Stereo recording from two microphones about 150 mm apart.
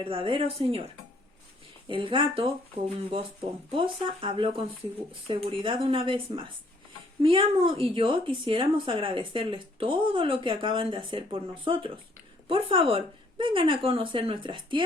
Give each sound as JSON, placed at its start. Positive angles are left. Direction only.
{"t": 0.0, "sound": "speech", "side_deg": -35}
{"t": 1.9, "sound": "speech", "side_deg": -35}